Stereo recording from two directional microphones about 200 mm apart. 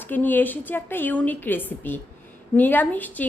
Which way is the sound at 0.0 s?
10° left (ahead or behind).